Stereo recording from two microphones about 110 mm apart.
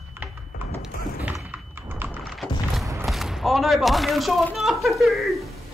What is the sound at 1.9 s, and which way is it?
Typing, 20° right (ahead or behind).